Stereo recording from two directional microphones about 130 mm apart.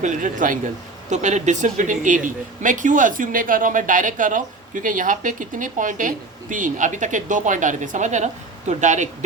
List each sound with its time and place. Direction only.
0.0 s speech: 75° right (ahead or behind)
1.1 s speech: 70° right (ahead or behind)